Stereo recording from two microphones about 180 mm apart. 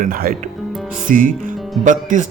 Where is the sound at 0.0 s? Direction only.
55° right (ahead or behind).